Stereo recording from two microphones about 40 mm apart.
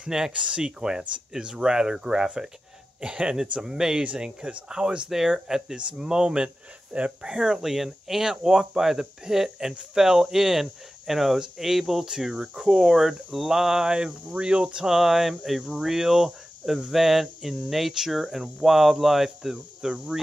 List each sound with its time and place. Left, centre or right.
0.0 s speech: centre
4.2 s speech: right
7.6 s speech: centre; by 14.9 s right
14.9 s speech: centre